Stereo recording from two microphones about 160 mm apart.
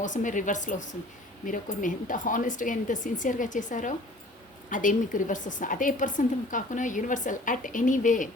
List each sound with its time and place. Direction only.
0.0 s a woman's voice: 50° left (ahead or behind)